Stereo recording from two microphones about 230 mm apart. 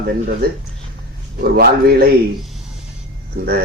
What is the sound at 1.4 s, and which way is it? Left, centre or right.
Speech, right.